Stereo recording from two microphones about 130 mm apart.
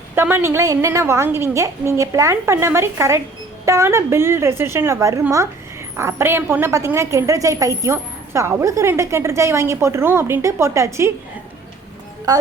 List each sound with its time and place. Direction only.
0.2 s a woman's voice: 15° right (ahead or behind)
12.3 s a woman's voice: 30° right (ahead or behind)